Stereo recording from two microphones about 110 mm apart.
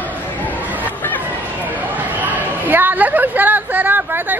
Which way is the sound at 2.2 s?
15° right (ahead or behind).